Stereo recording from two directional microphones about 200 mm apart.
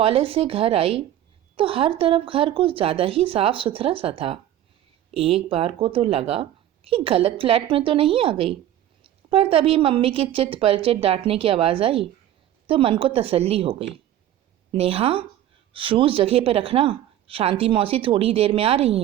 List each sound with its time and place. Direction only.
0.0 s a woman's voice: 30° right (ahead or behind)